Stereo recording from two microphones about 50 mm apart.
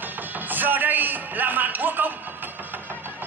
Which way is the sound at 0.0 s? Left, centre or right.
Right.